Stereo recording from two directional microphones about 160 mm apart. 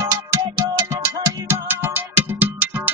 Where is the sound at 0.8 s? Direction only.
20° right (ahead or behind).